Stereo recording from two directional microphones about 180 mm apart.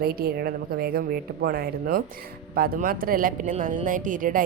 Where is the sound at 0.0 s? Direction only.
60° right (ahead or behind).